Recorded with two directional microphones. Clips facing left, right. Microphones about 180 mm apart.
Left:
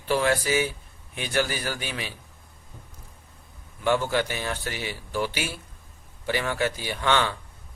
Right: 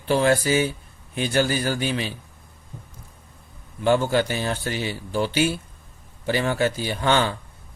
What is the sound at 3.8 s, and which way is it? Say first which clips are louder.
A man's voice: right 4 dB; 30° right (ahead or behind).